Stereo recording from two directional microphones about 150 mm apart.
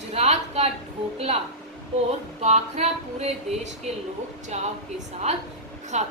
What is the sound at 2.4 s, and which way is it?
A woman's voice, 45° right (ahead or behind).